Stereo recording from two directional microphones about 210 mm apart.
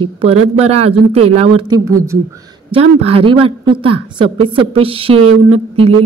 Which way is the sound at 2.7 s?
30° right (ahead or behind).